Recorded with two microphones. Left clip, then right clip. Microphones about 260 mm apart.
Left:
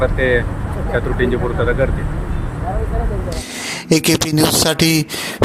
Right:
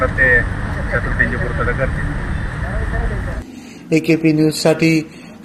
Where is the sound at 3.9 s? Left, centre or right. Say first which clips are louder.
Right 1 dB; left.